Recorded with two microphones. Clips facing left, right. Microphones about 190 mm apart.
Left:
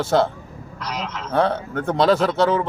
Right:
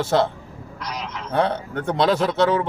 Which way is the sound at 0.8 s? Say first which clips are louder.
Left 3 dB; 15° right (ahead or behind).